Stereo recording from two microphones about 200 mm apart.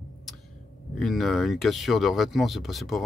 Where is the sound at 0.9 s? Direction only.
Centre (ahead or behind).